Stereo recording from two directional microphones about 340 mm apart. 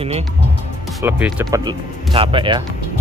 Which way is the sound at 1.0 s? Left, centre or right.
Centre.